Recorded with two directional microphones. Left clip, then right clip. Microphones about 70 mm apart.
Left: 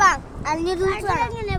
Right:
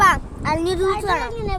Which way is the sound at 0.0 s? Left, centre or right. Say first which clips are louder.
Right 2 dB; right.